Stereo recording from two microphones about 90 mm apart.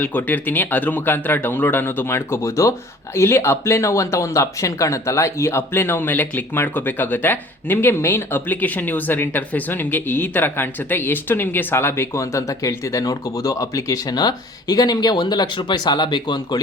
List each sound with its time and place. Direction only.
0.0 s speech: 20° left (ahead or behind); by 16.6 s 55° left (ahead or behind)